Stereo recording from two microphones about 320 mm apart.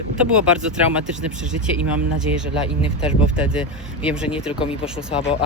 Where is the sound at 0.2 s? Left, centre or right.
Centre.